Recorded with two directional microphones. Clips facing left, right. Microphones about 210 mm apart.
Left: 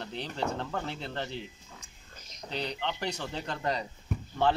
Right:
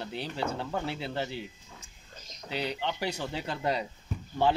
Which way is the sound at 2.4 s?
5° right (ahead or behind).